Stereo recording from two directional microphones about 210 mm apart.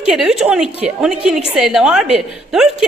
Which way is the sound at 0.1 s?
5° right (ahead or behind).